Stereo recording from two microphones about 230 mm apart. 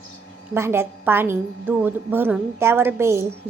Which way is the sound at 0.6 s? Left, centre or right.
Centre.